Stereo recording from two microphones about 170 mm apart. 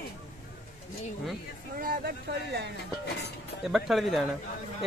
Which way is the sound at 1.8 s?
60° right (ahead or behind).